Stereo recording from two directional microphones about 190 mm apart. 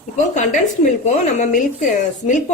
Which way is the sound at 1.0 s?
40° left (ahead or behind).